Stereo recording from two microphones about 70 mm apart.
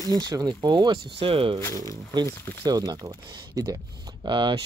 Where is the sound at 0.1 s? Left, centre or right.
Right.